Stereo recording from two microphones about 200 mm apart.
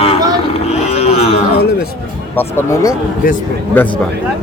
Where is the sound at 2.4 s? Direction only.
15° left (ahead or behind).